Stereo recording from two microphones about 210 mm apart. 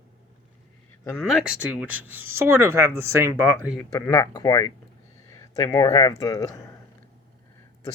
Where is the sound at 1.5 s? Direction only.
5° right (ahead or behind).